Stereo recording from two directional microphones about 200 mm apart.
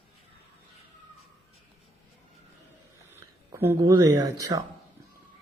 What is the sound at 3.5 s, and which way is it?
Speech, 15° right (ahead or behind).